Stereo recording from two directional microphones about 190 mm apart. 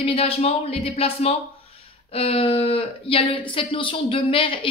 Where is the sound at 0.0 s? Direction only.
30° left (ahead or behind).